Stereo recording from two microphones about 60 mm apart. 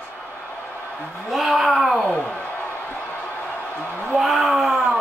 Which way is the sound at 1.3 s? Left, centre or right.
Centre.